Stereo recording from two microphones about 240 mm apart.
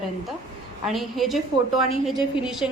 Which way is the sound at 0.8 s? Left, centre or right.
Centre.